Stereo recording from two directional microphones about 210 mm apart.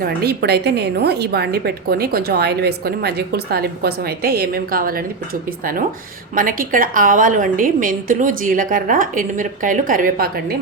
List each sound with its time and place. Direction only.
0.0 s a woman's voice: 50° right (ahead or behind)